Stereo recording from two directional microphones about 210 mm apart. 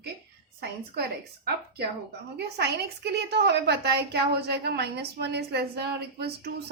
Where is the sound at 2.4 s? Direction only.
50° right (ahead or behind).